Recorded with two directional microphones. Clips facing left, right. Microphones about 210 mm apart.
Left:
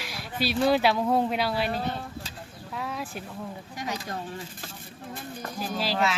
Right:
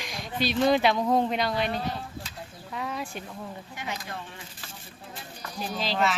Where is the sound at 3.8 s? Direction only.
40° left (ahead or behind).